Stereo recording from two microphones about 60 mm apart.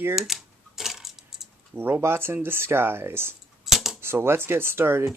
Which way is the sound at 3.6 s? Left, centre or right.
Centre.